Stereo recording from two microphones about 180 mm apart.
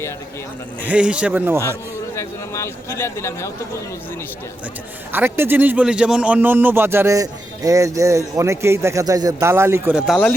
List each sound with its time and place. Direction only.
0.8 s a man's voice: 10° right (ahead or behind)
2.1 s a man's voice: 15° left (ahead or behind)
5.1 s a man's voice: 10° right (ahead or behind)